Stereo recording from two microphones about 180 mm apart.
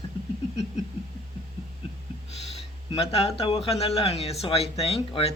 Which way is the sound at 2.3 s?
35° left (ahead or behind).